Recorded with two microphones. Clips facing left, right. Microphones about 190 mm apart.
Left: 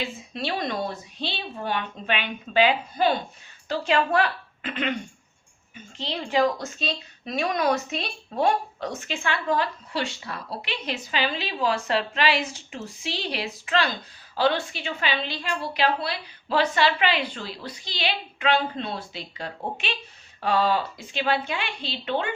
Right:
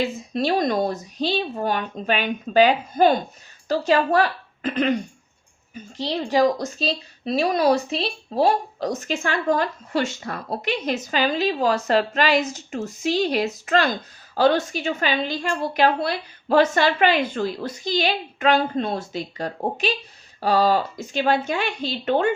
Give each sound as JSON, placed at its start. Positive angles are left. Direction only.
{"t": 0.3, "sound": "a woman's voice", "side_deg": -40}